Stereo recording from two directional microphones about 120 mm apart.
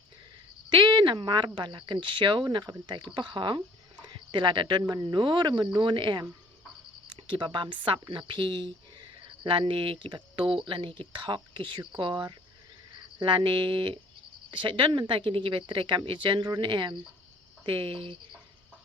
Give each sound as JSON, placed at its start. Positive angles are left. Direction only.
{"t": 0.7, "sound": "speech", "side_deg": -40}
{"t": 4.0, "sound": "a sound", "side_deg": -40}
{"t": 4.9, "sound": "speech", "side_deg": -40}